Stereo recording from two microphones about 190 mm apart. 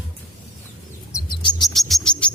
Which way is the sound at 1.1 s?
25° left (ahead or behind).